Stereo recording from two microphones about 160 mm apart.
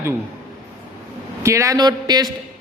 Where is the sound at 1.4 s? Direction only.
20° right (ahead or behind).